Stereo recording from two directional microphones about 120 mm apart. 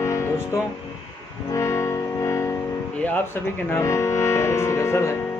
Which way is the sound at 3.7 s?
25° left (ahead or behind).